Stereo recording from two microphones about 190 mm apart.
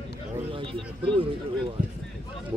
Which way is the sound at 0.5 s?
25° right (ahead or behind).